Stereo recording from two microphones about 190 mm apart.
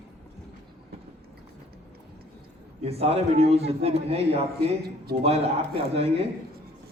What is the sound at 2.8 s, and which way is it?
A man's voice, 30° right (ahead or behind).